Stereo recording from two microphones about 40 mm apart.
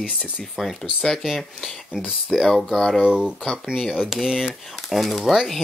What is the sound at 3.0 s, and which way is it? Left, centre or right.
Speech, right.